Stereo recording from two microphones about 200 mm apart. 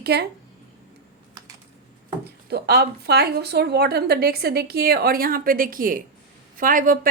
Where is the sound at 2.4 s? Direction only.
55° right (ahead or behind).